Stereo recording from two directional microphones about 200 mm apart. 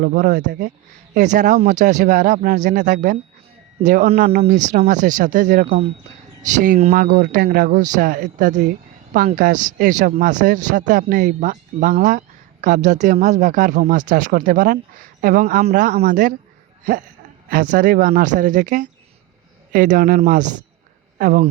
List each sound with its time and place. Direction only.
0.0 s a man's voice: 45° right (ahead or behind)
6.7 s speech: 35° right (ahead or behind)
6.9 s a man's voice: 50° right (ahead or behind)
17.5 s a man's voice: 45° right (ahead or behind)